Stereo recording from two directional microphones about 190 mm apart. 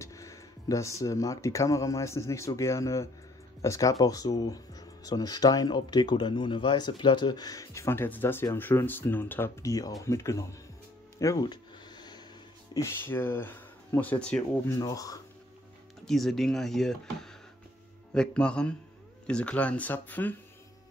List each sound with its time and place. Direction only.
0.0 s speech: 15° left (ahead or behind)
11.1 s a sound: 20° left (ahead or behind)
12.7 s speech: 10° left (ahead or behind)
14.7 s speech: 20° left (ahead or behind)
16.1 s speech: centre (ahead or behind)